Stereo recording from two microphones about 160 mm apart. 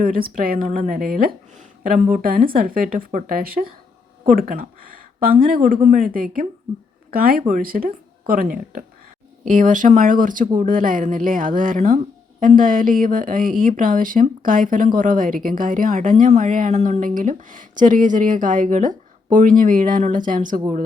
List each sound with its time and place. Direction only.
0.0 s a woman's voice: 65° right (ahead or behind)
9.5 s a woman's voice: 55° right (ahead or behind)